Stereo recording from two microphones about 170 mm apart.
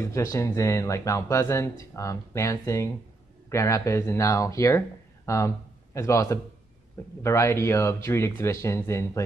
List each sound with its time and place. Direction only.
0.0 s speech: 20° left (ahead or behind)